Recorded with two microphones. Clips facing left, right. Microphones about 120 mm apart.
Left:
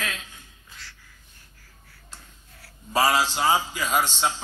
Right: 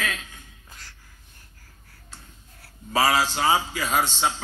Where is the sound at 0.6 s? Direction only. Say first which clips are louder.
Left 2 dB; 45° right (ahead or behind).